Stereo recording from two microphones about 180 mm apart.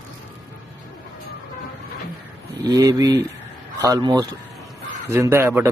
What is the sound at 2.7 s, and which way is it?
Speech, 20° right (ahead or behind).